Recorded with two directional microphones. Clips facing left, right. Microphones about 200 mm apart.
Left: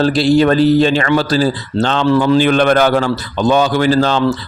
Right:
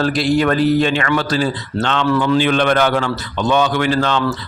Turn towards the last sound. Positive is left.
turn(degrees=35)  # may be behind; listen again after turning